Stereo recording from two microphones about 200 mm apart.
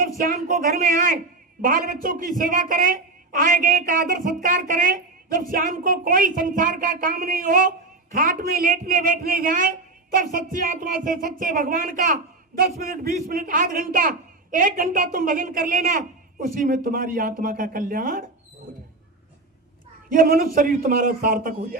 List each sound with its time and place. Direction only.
0.2 s a woman's voice: 45° right (ahead or behind)
20.1 s a woman's voice: 45° right (ahead or behind)